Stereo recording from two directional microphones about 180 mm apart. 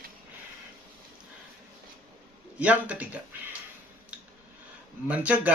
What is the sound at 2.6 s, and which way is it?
Speech, 10° right (ahead or behind).